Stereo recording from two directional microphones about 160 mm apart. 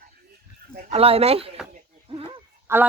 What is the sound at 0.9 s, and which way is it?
Speech, 35° right (ahead or behind).